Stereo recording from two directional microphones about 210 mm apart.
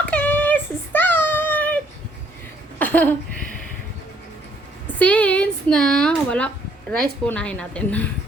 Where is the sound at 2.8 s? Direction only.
10° left (ahead or behind).